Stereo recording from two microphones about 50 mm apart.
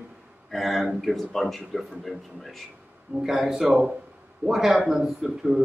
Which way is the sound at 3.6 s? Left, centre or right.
Centre.